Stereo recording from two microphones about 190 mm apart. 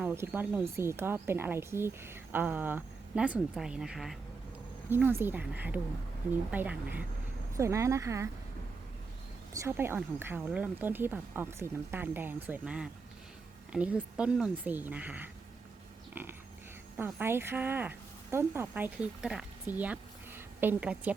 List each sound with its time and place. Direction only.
0.0 s a woman's voice: 10° right (ahead or behind)
9.5 s a woman's voice: 15° right (ahead or behind)
17.0 s speech: 10° right (ahead or behind)